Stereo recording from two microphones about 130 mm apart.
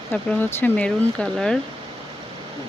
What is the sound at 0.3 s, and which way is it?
Speech, 15° left (ahead or behind).